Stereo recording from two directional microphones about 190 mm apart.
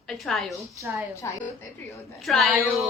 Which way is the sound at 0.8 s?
15° right (ahead or behind).